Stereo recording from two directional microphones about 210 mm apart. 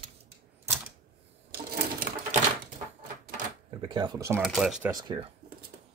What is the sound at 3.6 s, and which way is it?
Cash register, 25° right (ahead or behind).